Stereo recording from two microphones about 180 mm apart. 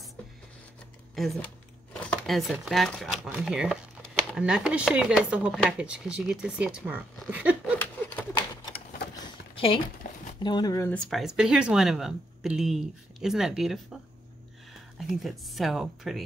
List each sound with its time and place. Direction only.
1.1 s speech: centre (ahead or behind)
10.4 s speech: 25° left (ahead or behind)
11.1 s speech: centre (ahead or behind)
15.0 s speech: centre (ahead or behind)